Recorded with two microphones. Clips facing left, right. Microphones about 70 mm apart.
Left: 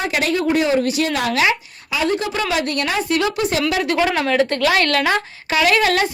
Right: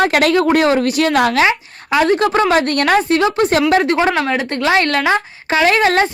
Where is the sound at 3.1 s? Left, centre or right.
Right.